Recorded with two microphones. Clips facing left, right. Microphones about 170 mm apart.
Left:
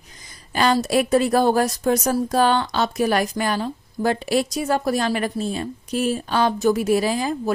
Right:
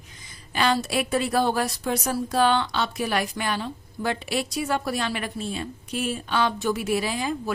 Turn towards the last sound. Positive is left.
turn(degrees=40)  # may be behind; listen again after turning